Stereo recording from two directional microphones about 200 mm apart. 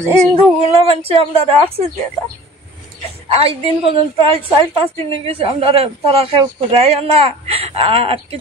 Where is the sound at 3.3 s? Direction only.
30° right (ahead or behind).